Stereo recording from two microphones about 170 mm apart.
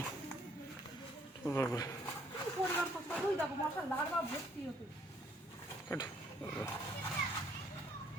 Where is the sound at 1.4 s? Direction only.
15° left (ahead or behind).